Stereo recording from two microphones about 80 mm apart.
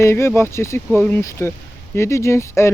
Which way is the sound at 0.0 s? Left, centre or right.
Left.